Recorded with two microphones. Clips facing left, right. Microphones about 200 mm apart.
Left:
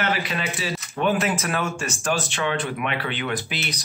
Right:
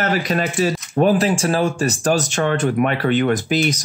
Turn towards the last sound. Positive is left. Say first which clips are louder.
# right 11 dB
turn(degrees=-45)  # may be behind; listen again after turning